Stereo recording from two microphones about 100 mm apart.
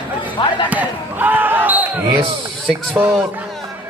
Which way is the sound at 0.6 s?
15° right (ahead or behind).